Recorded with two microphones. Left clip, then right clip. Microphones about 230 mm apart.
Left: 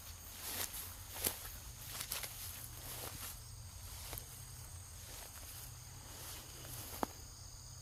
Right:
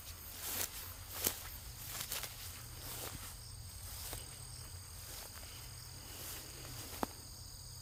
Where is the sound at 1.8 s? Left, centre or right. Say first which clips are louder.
Right 1 dB; centre.